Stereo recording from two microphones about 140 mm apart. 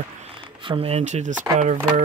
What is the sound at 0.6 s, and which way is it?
Speech, 40° right (ahead or behind).